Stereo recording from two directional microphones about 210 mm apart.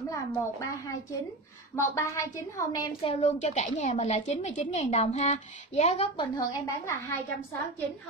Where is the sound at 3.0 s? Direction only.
30° left (ahead or behind); by 7.6 s 10° left (ahead or behind).